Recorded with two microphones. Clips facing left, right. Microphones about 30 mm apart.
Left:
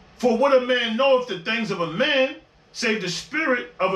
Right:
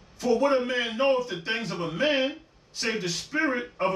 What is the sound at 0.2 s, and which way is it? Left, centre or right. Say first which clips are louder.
A man's voice: left 5 dB; left.